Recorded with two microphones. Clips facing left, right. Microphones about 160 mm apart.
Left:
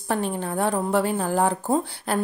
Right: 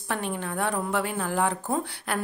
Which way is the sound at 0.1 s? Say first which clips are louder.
Left 5 dB; 35° left (ahead or behind).